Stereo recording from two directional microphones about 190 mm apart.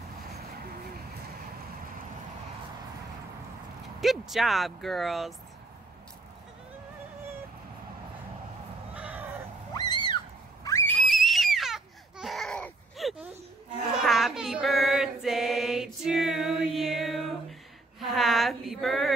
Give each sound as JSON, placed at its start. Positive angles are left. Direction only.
{"t": 4.0, "sound": "speech", "side_deg": 0}
{"t": 8.9, "sound": "cat", "side_deg": -5}
{"t": 9.8, "sound": "a sound", "side_deg": 25}
{"t": 14.0, "sound": "child singing", "side_deg": 0}